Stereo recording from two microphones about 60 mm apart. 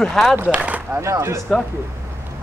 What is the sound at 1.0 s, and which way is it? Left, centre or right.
Speech, right.